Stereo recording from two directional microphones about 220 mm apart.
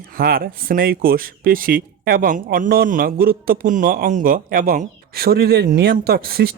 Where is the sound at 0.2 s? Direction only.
40° right (ahead or behind).